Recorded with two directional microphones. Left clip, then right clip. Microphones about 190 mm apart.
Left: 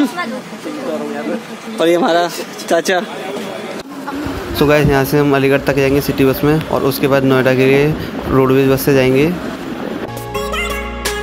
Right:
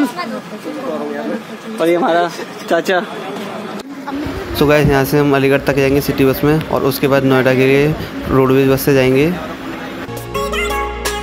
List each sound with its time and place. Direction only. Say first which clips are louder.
1.8 s speech: left 1 dB; 20° left (ahead or behind)
2.7 s speech: even; 5° left (ahead or behind)
4.6 s speech: even; centre (ahead or behind)
10.3 s music: right 2 dB; centre (ahead or behind)